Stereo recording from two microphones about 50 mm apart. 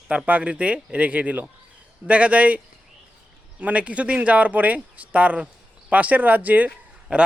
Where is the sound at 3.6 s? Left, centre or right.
Right.